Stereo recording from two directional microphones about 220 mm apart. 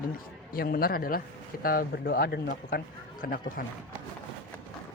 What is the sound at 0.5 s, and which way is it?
Speech, 40° left (ahead or behind).